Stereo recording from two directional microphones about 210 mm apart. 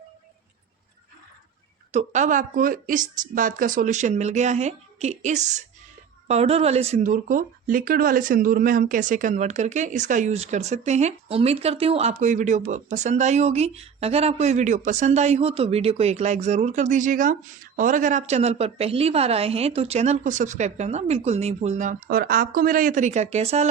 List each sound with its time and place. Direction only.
1.9 s speech: 35° right (ahead or behind)